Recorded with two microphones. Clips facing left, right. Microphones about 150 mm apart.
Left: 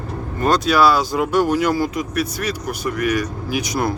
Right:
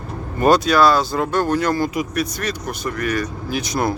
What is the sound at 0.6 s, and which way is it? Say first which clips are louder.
Speech: even; 5° left (ahead or behind).